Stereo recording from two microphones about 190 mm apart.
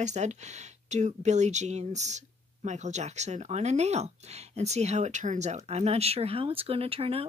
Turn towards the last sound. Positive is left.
turn(degrees=-30)  # may be behind; listen again after turning